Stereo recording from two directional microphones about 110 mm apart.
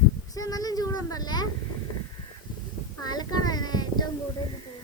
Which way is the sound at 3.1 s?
40° left (ahead or behind).